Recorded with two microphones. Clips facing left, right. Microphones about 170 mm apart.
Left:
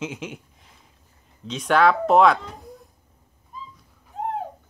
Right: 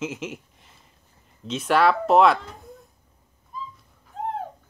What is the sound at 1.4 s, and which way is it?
Speech, 5° right (ahead or behind).